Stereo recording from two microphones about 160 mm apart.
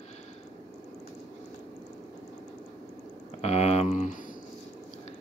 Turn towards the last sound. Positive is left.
turn(degrees=50)  # may be behind; listen again after turning